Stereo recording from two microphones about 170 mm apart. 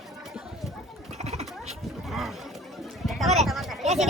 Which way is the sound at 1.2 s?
40° right (ahead or behind).